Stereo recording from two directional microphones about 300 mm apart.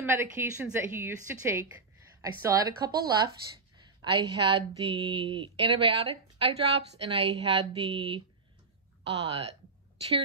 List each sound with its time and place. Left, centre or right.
0.0 s speech: centre